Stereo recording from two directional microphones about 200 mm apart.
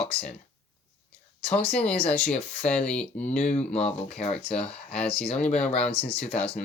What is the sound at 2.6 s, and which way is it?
Speech, 5° left (ahead or behind).